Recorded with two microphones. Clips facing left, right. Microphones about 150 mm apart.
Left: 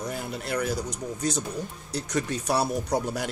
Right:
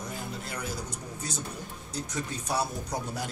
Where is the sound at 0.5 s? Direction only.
75° left (ahead or behind).